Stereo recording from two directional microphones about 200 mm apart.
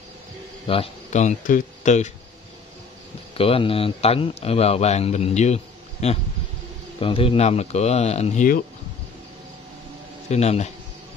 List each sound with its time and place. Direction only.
0.7 s speech: 30° left (ahead or behind)
3.3 s speech: 30° left (ahead or behind)
10.3 s speech: 35° left (ahead or behind)